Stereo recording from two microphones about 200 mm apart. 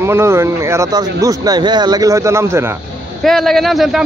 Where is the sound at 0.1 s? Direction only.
15° right (ahead or behind).